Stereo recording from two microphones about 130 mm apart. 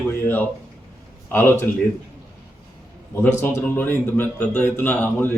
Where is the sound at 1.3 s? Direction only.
15° left (ahead or behind).